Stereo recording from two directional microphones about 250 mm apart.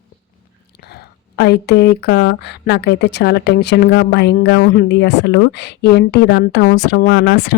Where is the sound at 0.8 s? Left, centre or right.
Left.